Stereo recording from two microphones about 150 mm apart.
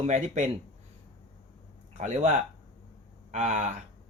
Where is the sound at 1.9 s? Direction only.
50° right (ahead or behind).